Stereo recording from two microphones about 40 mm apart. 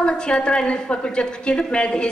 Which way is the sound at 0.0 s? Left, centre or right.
Left.